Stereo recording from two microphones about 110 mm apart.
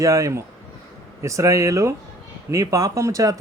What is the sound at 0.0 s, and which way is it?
Speech, 30° right (ahead or behind).